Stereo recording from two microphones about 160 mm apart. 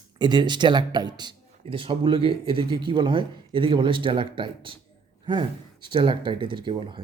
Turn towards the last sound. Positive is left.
turn(degrees=-30)  # may be behind; listen again after turning